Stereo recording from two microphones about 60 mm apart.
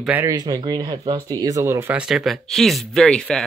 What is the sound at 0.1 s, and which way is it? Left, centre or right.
Speech, right.